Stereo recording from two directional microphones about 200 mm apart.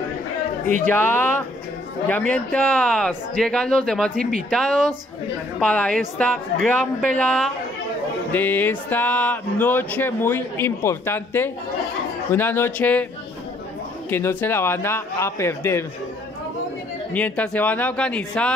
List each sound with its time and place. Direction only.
0.8 s speech: 10° left (ahead or behind)
14.1 s speech: 10° left (ahead or behind)
17.1 s speech: 5° left (ahead or behind)